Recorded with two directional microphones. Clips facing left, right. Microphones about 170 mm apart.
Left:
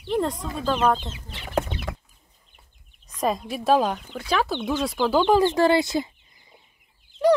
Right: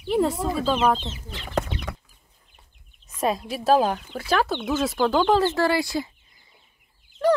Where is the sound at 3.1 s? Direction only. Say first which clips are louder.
Even; 5° right (ahead or behind).